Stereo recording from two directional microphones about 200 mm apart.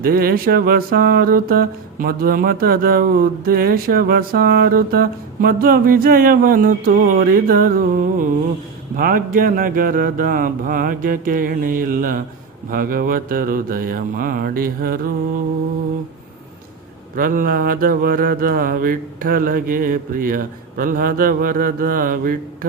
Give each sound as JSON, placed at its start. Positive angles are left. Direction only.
{"t": 0.0, "sound": "mantra", "side_deg": -50}
{"t": 17.2, "sound": "mantra", "side_deg": -45}